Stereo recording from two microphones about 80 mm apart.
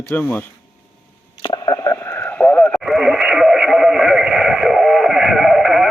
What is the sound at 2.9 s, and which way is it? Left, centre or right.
Radio, centre.